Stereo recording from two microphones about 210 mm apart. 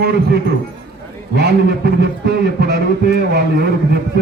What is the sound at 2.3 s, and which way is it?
Speech, 50° right (ahead or behind).